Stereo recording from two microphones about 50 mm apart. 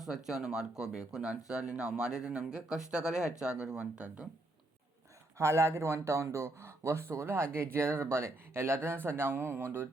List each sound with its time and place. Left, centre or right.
0.0 s speech: centre
5.4 s speech: right